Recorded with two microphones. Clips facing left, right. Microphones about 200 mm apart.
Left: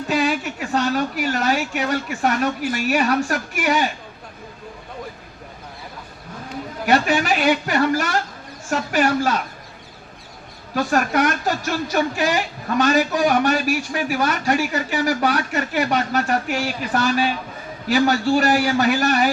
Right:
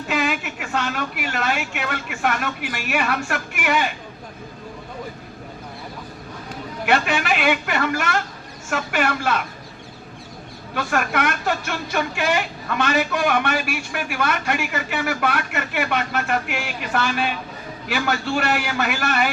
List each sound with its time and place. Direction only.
0.1 s speech: 35° left (ahead or behind)
6.9 s speech: 40° left (ahead or behind)
10.8 s speech: 40° left (ahead or behind)